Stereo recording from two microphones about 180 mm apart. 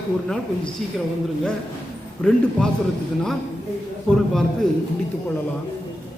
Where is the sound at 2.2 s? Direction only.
5° left (ahead or behind).